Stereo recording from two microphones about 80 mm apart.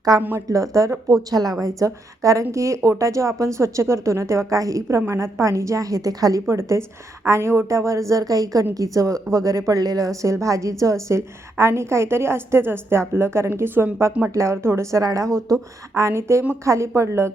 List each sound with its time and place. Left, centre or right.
0.2 s speech: right
0.4 s a woman's voice: right
6.5 s a woman's voice: right